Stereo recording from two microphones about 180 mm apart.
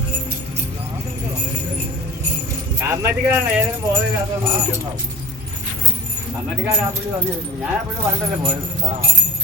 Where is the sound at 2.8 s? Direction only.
15° right (ahead or behind).